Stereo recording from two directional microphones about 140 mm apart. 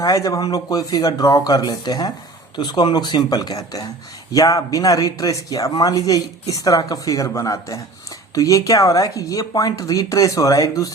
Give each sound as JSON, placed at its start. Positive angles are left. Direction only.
{"t": 0.0, "sound": "speech", "side_deg": 25}